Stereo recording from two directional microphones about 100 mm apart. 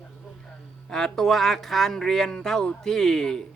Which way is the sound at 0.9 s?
5° left (ahead or behind).